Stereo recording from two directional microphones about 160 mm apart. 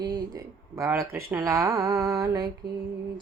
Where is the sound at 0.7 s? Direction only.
20° right (ahead or behind).